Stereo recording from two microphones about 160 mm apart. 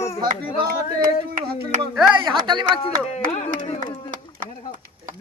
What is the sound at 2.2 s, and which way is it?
Speech, 30° right (ahead or behind).